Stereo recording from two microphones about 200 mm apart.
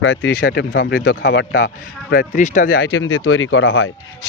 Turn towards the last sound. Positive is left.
turn(degrees=70)  # may be behind; listen again after turning